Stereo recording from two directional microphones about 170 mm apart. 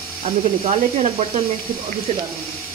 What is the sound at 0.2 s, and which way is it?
Speech, 40° right (ahead or behind).